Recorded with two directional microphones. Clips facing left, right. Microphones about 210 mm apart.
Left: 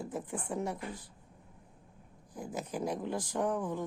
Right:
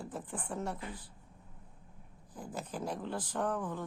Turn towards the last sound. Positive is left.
turn(degrees=10)  # may be behind; listen again after turning